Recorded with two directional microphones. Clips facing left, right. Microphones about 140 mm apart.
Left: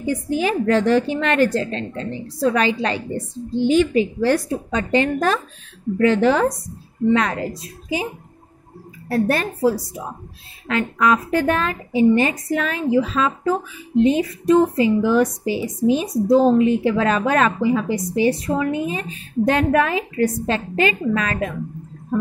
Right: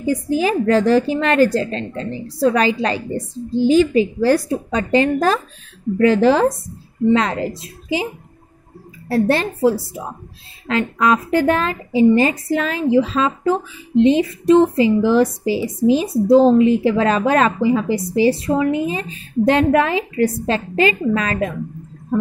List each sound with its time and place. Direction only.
0.0 s a woman's voice: 35° right (ahead or behind)
9.1 s a woman's voice: 25° right (ahead or behind)
14.6 s a woman's voice: 30° right (ahead or behind)